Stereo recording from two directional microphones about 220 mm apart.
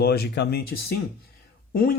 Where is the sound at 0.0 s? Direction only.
45° left (ahead or behind).